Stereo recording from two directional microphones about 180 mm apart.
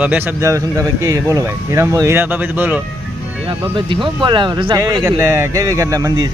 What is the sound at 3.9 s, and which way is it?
Speech, 25° right (ahead or behind).